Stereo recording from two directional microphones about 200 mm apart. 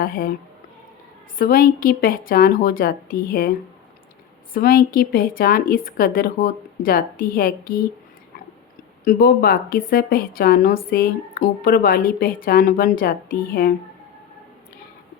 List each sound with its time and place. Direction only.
0.0 s a woman's voice: 45° left (ahead or behind)
1.4 s a woman's voice: 45° left (ahead or behind)
4.5 s a woman's voice: 45° left (ahead or behind)
9.0 s a woman's voice: 45° left (ahead or behind)